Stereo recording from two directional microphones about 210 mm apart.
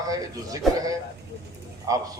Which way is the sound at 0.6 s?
Centre (ahead or behind).